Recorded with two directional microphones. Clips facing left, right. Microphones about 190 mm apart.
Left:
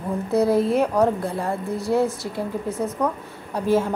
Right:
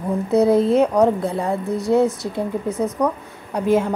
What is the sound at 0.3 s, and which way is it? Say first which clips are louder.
A woman's voice: right 4 dB; 20° right (ahead or behind).